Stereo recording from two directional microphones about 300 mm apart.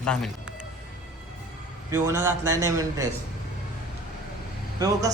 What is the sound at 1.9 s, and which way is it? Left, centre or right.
A man's voice, centre.